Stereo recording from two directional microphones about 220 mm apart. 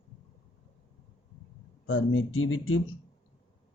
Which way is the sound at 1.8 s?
65° left (ahead or behind).